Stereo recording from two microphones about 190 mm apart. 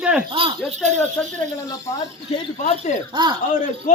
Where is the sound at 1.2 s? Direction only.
5° left (ahead or behind).